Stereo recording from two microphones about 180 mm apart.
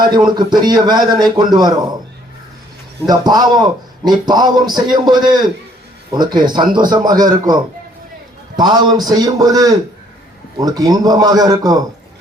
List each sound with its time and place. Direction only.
0.0 s a man's voice: 25° right (ahead or behind)
3.1 s a man's voice: 20° right (ahead or behind)